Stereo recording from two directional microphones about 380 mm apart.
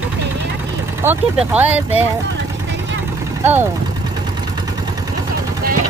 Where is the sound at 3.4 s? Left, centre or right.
Centre.